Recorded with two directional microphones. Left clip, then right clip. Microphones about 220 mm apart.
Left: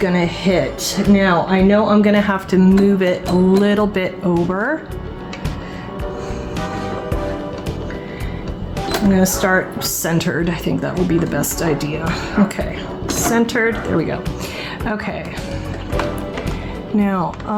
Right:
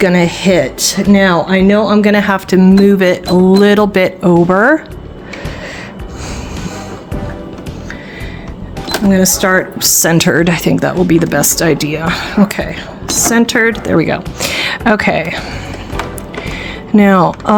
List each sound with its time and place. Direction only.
0.0 s speech: 45° right (ahead or behind)
9.1 s speech: 45° right (ahead or behind)
17.0 s speech: 45° right (ahead or behind)